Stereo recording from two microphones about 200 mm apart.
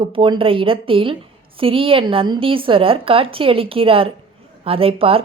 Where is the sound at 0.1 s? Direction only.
25° right (ahead or behind).